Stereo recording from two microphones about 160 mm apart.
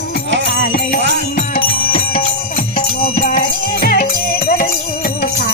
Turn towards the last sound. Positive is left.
turn(degrees=65)  # may be behind; listen again after turning